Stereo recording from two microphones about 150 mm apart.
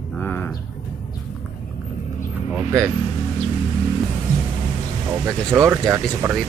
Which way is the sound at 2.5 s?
15° right (ahead or behind).